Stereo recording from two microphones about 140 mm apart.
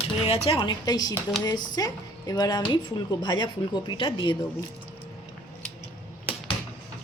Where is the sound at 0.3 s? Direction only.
45° left (ahead or behind).